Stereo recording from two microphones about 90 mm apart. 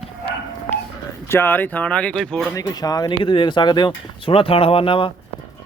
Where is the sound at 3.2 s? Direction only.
70° left (ahead or behind).